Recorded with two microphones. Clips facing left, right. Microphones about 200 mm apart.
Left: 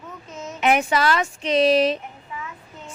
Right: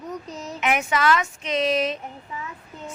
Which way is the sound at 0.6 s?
35° left (ahead or behind).